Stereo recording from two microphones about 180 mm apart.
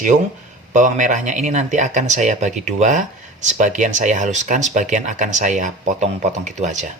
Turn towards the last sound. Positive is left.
turn(degrees=-40)  # may be behind; listen again after turning